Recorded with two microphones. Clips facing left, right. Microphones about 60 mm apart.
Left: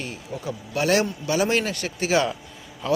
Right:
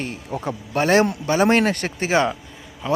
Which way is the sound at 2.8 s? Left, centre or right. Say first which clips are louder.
Right 1 dB; right.